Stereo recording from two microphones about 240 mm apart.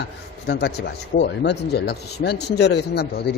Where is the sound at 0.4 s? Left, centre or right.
Left.